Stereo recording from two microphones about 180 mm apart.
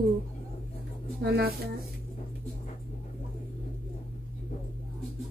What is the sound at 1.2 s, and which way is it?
Child singing, 65° right (ahead or behind).